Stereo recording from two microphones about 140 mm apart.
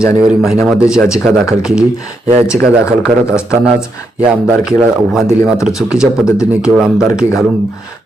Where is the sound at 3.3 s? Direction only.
20° left (ahead or behind).